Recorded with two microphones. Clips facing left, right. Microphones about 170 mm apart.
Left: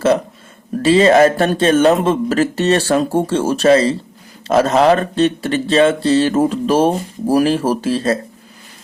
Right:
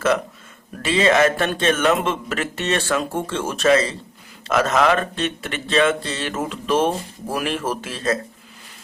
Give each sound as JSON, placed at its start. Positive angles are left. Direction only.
{"t": 0.8, "sound": "speech", "side_deg": 35}